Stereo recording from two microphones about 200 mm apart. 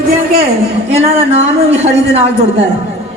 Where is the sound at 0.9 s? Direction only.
30° right (ahead or behind).